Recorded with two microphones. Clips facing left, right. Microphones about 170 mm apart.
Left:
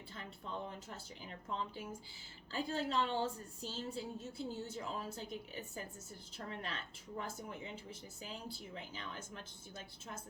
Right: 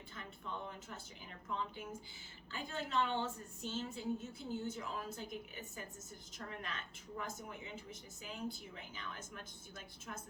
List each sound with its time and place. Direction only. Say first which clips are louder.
0.2 s speech: left 1 dB; 35° left (ahead or behind)